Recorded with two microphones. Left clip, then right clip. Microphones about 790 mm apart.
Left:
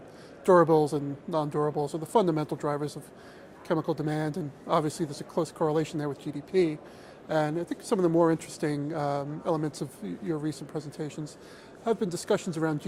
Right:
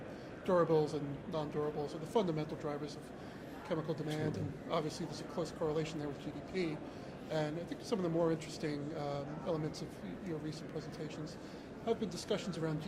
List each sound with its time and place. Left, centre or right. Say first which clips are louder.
0.4 s a woman's voice: left 11 dB; left